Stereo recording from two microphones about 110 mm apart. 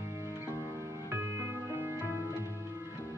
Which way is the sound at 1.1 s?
25° right (ahead or behind).